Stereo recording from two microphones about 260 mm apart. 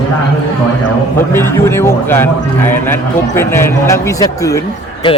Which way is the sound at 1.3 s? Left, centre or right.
Centre.